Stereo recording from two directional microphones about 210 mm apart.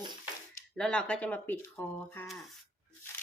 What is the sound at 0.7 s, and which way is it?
Speech, 5° left (ahead or behind).